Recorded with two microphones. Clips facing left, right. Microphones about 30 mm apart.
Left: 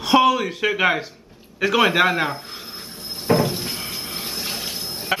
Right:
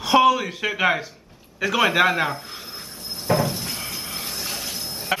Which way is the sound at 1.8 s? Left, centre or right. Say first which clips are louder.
Left 1 dB; centre.